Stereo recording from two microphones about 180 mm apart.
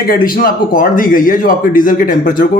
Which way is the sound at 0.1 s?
50° left (ahead or behind).